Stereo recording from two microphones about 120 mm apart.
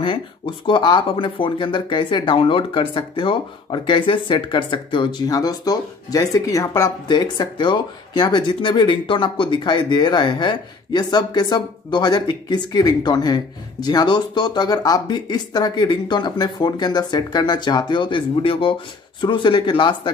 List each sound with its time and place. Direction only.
0.0 s speech: 45° left (ahead or behind)